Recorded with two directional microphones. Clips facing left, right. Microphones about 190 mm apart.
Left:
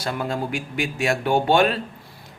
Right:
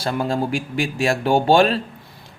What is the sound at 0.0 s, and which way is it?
Speech, 30° right (ahead or behind).